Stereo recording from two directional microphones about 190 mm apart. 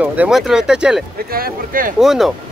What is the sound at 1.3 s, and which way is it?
Speech, 50° right (ahead or behind).